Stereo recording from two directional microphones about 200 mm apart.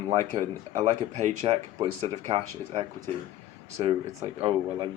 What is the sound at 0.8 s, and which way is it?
Speech, 35° right (ahead or behind).